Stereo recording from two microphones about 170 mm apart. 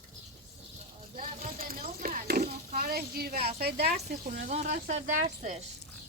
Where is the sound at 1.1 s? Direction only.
55° right (ahead or behind).